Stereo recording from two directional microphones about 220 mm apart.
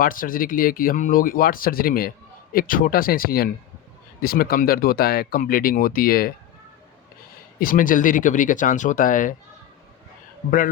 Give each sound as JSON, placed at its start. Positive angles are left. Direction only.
{"t": 0.0, "sound": "speech", "side_deg": 40}
{"t": 7.6, "sound": "speech", "side_deg": 40}